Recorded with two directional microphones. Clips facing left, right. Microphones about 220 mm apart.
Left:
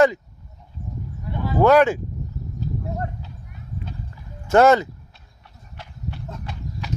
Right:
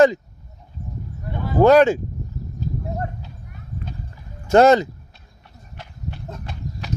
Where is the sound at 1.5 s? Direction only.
40° right (ahead or behind).